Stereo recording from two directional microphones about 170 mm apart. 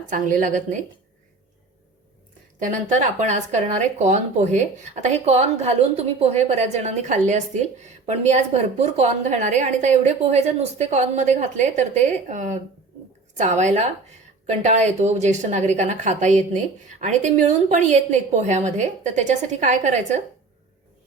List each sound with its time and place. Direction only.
0.1 s a woman's voice: 50° right (ahead or behind)
2.9 s a woman's voice: 45° right (ahead or behind)